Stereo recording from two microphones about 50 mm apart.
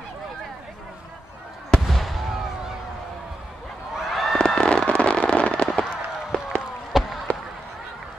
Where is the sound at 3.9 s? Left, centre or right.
Centre.